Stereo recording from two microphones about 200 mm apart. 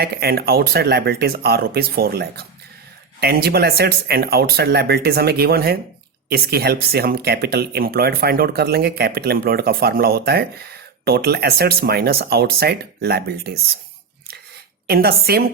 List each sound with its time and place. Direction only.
0.0 s speech: 50° right (ahead or behind)
14.8 s speech: 50° right (ahead or behind)